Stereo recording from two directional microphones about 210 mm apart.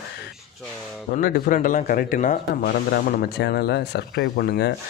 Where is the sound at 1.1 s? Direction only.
45° left (ahead or behind).